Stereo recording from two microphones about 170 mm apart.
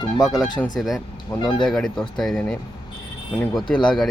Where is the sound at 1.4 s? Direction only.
25° left (ahead or behind).